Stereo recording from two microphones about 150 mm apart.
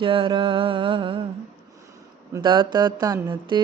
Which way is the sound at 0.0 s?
35° right (ahead or behind).